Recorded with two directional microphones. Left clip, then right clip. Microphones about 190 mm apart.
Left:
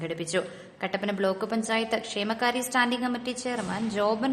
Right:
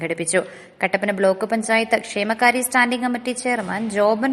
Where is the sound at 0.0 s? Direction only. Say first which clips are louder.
Right 8 dB; 20° right (ahead or behind).